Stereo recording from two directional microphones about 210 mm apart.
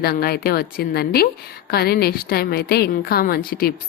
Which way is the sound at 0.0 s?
45° left (ahead or behind).